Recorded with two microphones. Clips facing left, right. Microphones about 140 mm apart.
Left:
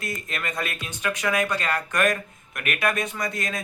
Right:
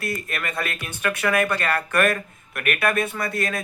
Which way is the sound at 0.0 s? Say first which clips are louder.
Right 3 dB; 20° left (ahead or behind).